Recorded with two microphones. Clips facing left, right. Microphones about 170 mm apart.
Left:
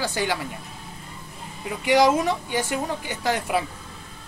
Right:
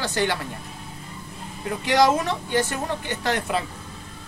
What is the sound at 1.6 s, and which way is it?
Speech, 10° left (ahead or behind).